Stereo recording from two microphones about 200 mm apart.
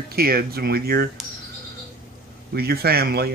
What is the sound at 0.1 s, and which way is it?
Speech, 50° right (ahead or behind).